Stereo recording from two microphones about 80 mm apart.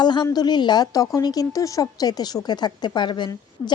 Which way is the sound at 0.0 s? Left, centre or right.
Left.